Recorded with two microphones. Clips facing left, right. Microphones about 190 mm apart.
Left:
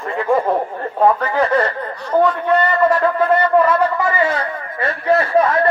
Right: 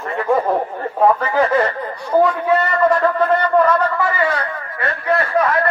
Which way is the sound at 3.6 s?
10° left (ahead or behind).